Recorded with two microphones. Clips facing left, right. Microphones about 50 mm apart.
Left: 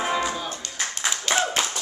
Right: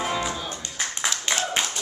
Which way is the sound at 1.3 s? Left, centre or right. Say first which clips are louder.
Left 5 dB; right.